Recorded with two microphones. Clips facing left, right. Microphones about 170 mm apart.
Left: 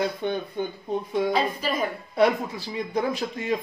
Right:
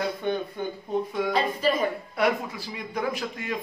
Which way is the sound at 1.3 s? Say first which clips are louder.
Right 1 dB; centre (ahead or behind).